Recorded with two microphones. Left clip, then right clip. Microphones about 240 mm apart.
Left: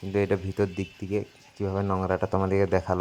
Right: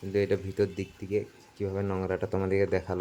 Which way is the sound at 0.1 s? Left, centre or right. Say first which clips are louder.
Left 2 dB; centre.